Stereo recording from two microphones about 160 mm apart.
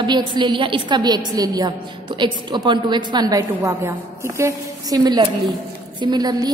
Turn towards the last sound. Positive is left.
turn(degrees=-25)  # may be behind; listen again after turning